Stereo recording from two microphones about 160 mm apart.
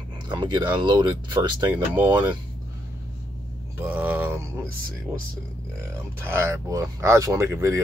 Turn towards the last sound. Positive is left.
turn(degrees=-15)  # may be behind; listen again after turning